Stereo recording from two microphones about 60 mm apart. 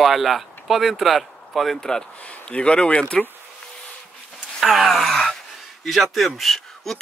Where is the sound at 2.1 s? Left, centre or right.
Left.